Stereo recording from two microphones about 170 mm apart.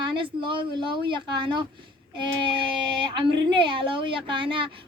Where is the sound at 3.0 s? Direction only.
30° right (ahead or behind).